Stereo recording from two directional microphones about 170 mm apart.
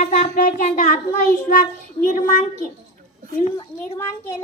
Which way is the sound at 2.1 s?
50° left (ahead or behind).